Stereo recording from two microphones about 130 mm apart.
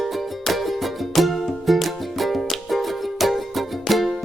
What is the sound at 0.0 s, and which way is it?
Music, centre (ahead or behind).